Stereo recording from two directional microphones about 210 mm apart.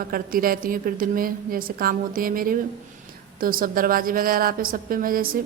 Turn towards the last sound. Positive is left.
turn(degrees=-45)  # may be behind; listen again after turning